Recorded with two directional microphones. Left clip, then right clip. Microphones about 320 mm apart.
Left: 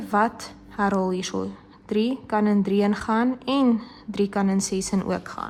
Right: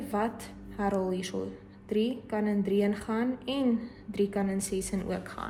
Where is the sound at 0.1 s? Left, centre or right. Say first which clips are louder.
Left 10 dB; centre.